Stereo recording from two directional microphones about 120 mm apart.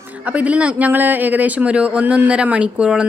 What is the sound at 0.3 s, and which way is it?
Speech, 10° right (ahead or behind).